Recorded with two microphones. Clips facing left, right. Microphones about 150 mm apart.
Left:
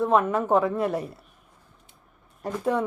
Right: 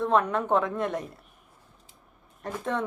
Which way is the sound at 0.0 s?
5° left (ahead or behind).